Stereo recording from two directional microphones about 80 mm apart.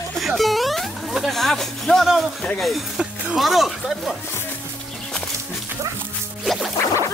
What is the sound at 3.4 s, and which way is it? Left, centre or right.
Speech, centre.